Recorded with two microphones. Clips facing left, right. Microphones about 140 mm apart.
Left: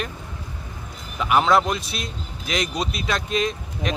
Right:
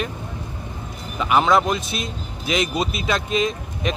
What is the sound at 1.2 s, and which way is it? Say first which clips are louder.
Speech: right 1 dB; centre (ahead or behind).